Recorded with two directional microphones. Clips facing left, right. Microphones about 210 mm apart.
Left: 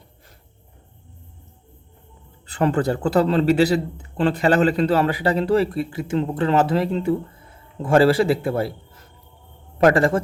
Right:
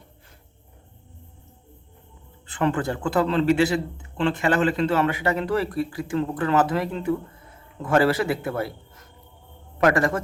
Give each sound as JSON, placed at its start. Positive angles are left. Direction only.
{"t": 2.5, "sound": "a man's voice", "side_deg": 40}